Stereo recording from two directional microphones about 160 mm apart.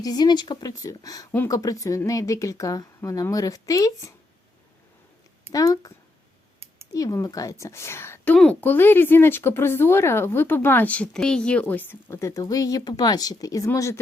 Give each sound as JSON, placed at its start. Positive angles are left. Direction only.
{"t": 0.0, "sound": "speech", "side_deg": 25}
{"t": 5.5, "sound": "speech", "side_deg": 25}
{"t": 6.9, "sound": "a woman's voice", "side_deg": 20}